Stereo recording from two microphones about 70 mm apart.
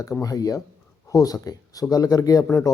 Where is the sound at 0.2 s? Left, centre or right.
Left.